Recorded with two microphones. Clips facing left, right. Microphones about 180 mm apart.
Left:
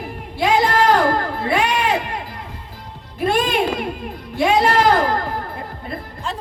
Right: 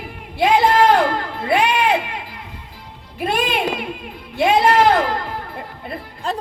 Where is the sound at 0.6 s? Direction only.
40° left (ahead or behind).